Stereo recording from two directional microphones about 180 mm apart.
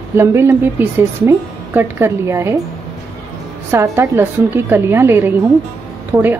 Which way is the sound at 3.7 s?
15° right (ahead or behind).